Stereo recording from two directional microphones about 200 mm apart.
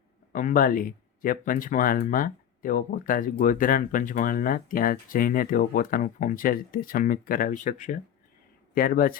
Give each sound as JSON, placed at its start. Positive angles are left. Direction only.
{"t": 0.3, "sound": "speech", "side_deg": 40}